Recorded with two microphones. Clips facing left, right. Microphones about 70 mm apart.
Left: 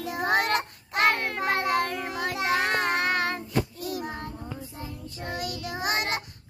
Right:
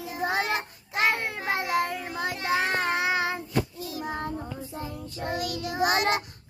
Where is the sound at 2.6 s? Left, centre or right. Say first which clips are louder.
Left 1 dB; left.